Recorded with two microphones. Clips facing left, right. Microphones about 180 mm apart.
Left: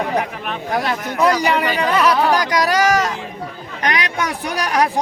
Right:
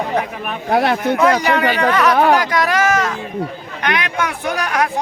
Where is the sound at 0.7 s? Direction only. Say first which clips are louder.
Right 7 dB; 60° right (ahead or behind).